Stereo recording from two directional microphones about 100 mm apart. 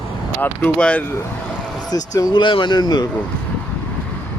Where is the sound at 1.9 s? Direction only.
40° left (ahead or behind).